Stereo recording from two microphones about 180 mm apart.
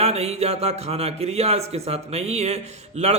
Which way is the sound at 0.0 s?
35° right (ahead or behind).